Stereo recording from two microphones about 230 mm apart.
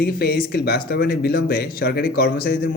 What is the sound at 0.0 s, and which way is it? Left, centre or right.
A man's voice, left.